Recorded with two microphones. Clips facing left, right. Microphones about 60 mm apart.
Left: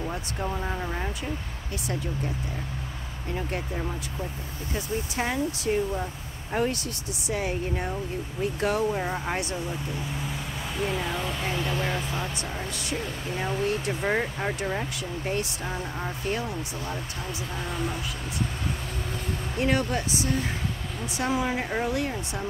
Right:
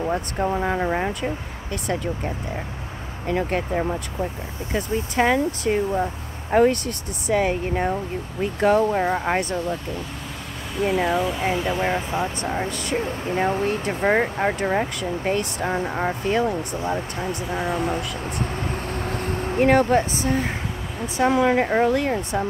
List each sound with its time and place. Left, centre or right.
0.1 s speech: right
4.7 s speech: right
8.5 s speech: right
11.1 s speech: centre
11.8 s speech: right
12.4 s speech: right
19.3 s speech: right
21.3 s speech: right
21.6 s speech: right